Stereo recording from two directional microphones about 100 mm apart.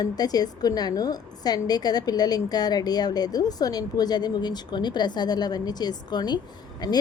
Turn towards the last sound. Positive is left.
turn(degrees=45)  # may be behind; listen again after turning